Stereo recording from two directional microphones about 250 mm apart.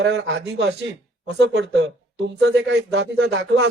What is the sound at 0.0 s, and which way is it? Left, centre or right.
Speech, right.